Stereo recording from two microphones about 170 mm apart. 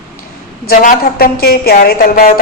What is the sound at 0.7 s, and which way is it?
Speech, 50° left (ahead or behind).